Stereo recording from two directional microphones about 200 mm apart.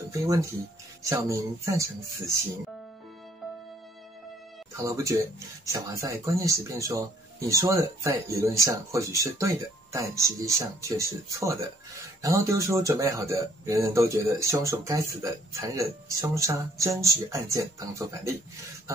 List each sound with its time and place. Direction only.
0.1 s a man's voice: 15° right (ahead or behind)
4.7 s a man's voice: 15° right (ahead or behind)